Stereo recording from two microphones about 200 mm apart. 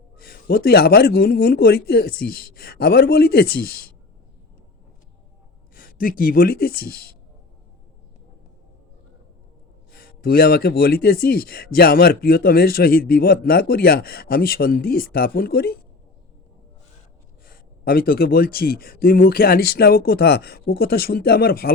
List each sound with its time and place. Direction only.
0.2 s speech: 45° left (ahead or behind)
5.7 s speech: 45° left (ahead or behind)
9.9 s speech: 45° left (ahead or behind)
17.4 s speech: 45° left (ahead or behind)